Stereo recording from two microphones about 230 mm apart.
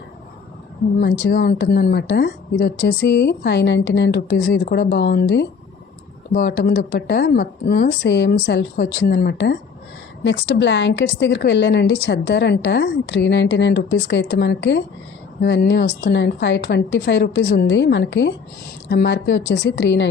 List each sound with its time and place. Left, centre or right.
0.9 s a woman's voice: left